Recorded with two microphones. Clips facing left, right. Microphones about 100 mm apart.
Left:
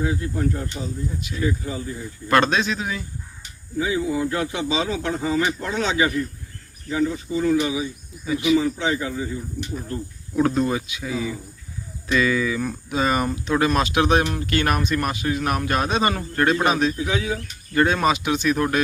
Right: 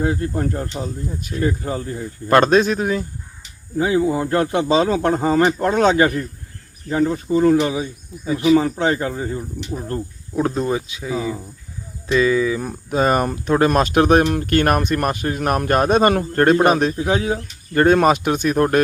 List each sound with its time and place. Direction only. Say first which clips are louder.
0.0 s speech: right 3 dB; 50° right (ahead or behind)
10.3 s speech: even; 25° right (ahead or behind)
12.9 s speech: right 5 dB; 45° right (ahead or behind)